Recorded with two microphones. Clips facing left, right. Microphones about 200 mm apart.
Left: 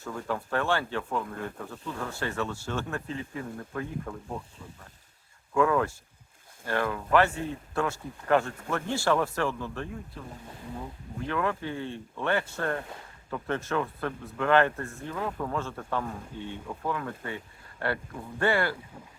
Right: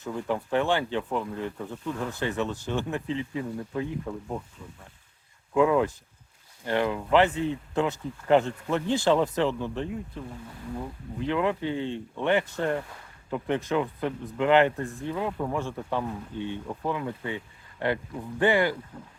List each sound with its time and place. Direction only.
0.0 s speech: 20° right (ahead or behind)
5.5 s speech: 15° right (ahead or behind)
11.2 s speech: 20° right (ahead or behind)